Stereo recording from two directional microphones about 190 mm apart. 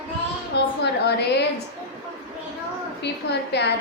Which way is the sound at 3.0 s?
65° left (ahead or behind).